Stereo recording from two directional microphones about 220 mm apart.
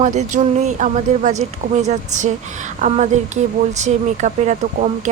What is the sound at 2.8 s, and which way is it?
A woman's voice, 35° right (ahead or behind).